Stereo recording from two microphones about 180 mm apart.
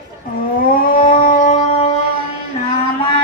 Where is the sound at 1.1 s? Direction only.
45° left (ahead or behind).